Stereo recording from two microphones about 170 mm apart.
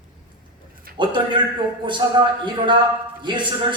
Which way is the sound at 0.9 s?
30° right (ahead or behind).